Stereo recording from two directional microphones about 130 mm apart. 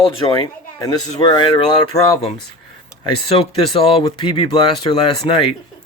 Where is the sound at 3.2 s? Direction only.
45° left (ahead or behind).